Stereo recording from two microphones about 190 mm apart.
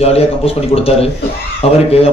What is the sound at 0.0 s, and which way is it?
A man's voice, 30° left (ahead or behind).